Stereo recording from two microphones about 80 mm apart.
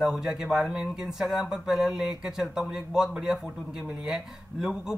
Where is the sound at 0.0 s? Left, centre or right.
Centre.